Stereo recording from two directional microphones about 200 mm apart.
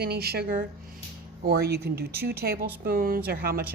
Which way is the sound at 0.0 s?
50° right (ahead or behind).